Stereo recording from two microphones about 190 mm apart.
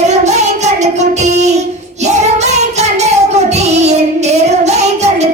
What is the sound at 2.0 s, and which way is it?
Child singing, 35° right (ahead or behind).